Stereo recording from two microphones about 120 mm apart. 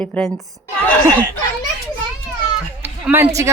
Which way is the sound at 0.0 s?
10° left (ahead or behind).